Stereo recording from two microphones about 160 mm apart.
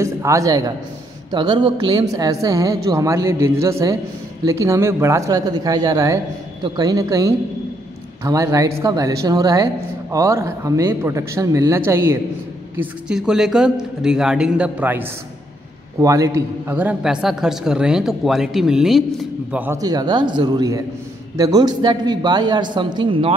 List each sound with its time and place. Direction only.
0.0 s a woman's voice: 20° right (ahead or behind)
12.7 s a man's voice: 5° right (ahead or behind)
19.8 s a woman's voice: 25° right (ahead or behind)